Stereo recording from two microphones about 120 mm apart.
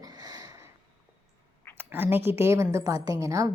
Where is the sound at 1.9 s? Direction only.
15° right (ahead or behind).